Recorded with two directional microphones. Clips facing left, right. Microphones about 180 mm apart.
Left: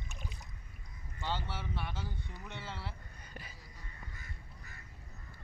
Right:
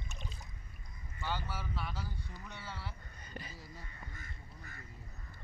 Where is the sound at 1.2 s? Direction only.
25° left (ahead or behind).